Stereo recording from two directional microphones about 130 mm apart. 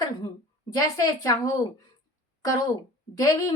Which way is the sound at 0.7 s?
30° left (ahead or behind).